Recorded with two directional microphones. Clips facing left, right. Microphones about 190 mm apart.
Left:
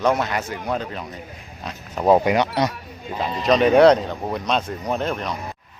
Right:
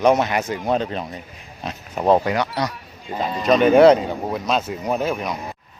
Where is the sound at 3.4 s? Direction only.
Centre (ahead or behind).